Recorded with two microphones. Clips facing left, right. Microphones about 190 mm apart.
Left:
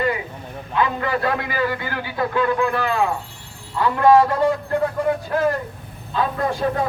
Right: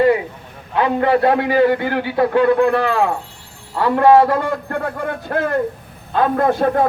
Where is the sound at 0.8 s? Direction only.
65° right (ahead or behind).